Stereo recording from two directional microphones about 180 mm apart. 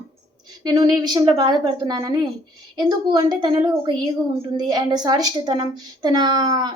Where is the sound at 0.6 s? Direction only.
25° right (ahead or behind).